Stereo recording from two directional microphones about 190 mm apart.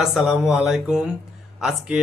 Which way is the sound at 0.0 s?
Centre (ahead or behind).